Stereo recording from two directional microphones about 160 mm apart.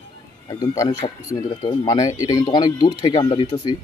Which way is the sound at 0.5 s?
25° left (ahead or behind).